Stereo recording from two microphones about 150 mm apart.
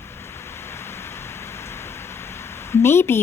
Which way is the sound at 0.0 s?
15° left (ahead or behind).